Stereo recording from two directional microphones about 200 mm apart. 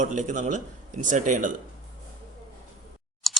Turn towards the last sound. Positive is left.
turn(degrees=0)  # may be behind; listen again after turning